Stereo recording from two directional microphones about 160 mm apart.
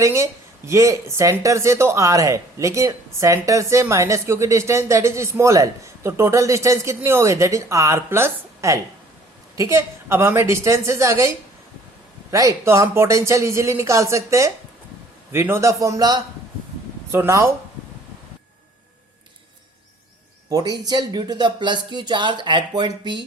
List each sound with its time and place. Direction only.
0.0 s a woman's voice: 20° right (ahead or behind)
20.5 s speech: 25° right (ahead or behind)